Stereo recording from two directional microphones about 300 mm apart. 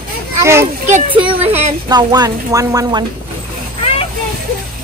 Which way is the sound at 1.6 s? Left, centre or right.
Centre.